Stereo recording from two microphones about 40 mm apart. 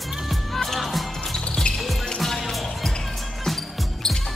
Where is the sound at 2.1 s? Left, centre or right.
Centre.